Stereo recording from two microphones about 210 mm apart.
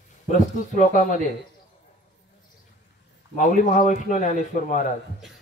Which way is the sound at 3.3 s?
40° left (ahead or behind).